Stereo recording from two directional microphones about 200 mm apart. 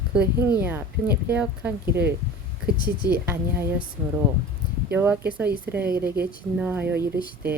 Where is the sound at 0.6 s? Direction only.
10° right (ahead or behind).